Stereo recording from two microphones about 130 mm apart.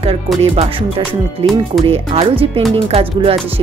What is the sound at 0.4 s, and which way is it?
Speech, 50° right (ahead or behind).